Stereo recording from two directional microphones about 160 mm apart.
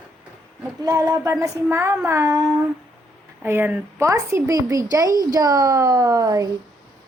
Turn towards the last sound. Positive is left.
turn(degrees=-20)  # may be behind; listen again after turning